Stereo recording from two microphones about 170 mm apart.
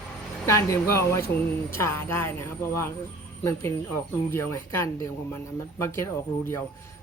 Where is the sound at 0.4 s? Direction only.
15° left (ahead or behind).